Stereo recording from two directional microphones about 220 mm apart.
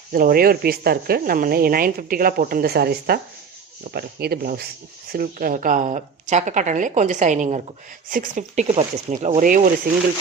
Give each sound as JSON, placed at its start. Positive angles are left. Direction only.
{"t": 0.1, "sound": "speech", "side_deg": -40}